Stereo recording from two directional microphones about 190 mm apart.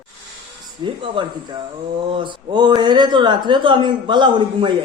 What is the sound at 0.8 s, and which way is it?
Speech, 25° right (ahead or behind).